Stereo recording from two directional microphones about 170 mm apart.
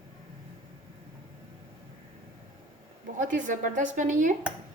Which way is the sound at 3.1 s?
50° right (ahead or behind).